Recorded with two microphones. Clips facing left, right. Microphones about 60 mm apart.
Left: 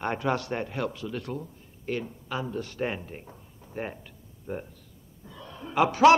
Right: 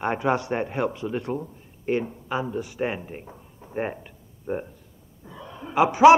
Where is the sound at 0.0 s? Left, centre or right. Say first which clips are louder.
Right 4 dB; centre.